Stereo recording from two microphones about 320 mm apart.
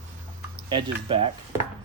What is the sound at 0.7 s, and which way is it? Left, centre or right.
Speech, centre.